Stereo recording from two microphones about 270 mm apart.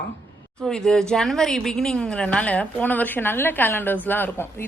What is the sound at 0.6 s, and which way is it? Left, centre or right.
Speech, centre.